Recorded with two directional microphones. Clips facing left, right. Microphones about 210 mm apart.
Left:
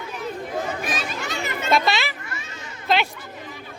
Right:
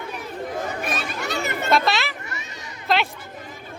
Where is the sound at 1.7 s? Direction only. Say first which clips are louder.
Even; centre (ahead or behind).